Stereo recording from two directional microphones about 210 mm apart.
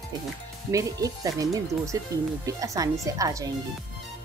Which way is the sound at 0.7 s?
15° right (ahead or behind).